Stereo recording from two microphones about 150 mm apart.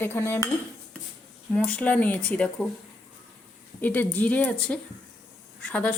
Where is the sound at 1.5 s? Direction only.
10° left (ahead or behind).